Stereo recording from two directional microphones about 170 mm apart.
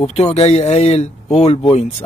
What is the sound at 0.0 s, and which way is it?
Speech, 40° left (ahead or behind).